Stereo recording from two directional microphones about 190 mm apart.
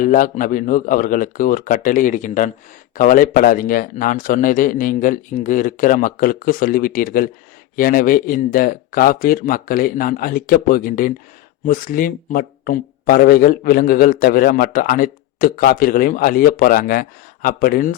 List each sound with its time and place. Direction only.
0.0 s speech: 45° left (ahead or behind)